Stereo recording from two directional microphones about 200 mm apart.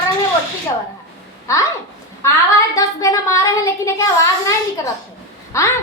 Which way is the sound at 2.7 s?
15° left (ahead or behind).